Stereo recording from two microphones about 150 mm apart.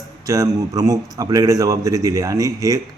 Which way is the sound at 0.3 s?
25° right (ahead or behind).